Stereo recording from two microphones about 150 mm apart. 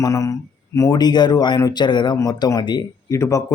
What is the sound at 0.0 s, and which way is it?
Speech, 20° left (ahead or behind).